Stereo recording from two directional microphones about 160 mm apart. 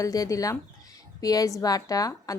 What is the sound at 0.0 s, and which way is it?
Speech, 20° left (ahead or behind).